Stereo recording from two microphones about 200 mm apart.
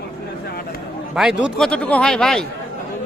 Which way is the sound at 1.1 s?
5° right (ahead or behind).